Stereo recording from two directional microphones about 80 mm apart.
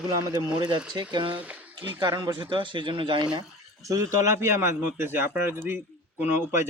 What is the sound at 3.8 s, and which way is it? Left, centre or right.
A man's voice, right.